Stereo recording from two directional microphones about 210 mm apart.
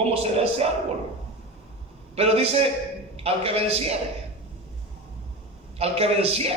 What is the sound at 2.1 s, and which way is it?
A man's voice, 30° right (ahead or behind).